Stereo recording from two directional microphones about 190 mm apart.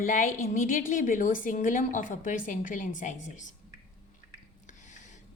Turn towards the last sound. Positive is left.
turn(degrees=40)  # may be behind; listen again after turning